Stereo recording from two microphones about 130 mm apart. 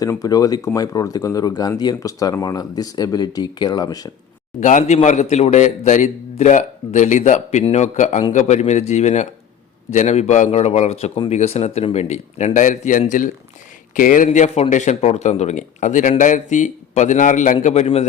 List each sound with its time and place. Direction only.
0.0 s speech: 25° left (ahead or behind)
4.6 s a man's voice: 65° left (ahead or behind)
17.8 s speech: 50° left (ahead or behind)